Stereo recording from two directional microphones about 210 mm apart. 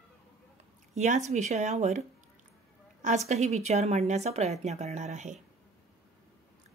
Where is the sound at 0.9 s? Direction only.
35° right (ahead or behind).